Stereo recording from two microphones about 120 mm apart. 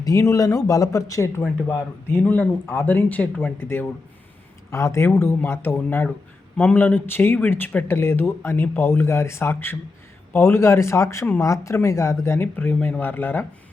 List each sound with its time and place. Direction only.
0.0 s a man's voice: 25° left (ahead or behind)